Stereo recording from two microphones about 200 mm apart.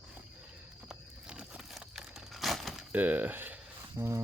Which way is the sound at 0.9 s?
5° right (ahead or behind).